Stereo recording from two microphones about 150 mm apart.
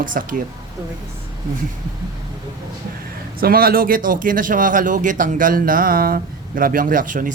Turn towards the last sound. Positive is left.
turn(degrees=-60)  # may be behind; listen again after turning